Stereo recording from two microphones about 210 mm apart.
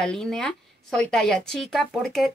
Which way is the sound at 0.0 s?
5° left (ahead or behind).